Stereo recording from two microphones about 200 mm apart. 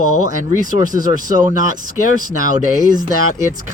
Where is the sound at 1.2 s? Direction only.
40° right (ahead or behind).